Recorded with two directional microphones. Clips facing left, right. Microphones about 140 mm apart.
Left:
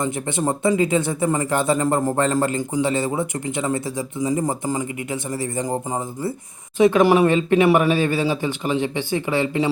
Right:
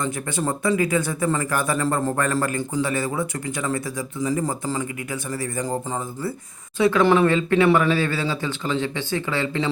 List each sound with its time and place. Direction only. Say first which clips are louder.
0.0 s speech: left 3 dB; 20° left (ahead or behind)